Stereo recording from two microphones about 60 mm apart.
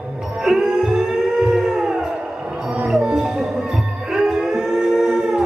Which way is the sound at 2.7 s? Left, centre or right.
Centre.